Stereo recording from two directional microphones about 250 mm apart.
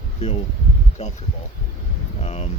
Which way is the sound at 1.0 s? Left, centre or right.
Left.